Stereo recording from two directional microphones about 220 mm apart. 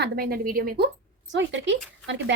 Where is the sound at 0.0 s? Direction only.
45° right (ahead or behind).